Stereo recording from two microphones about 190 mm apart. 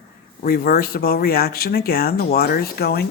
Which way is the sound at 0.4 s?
50° left (ahead or behind).